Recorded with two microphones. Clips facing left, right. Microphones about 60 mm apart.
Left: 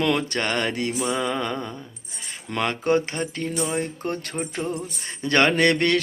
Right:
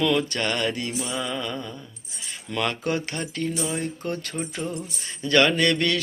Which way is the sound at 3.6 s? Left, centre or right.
Left.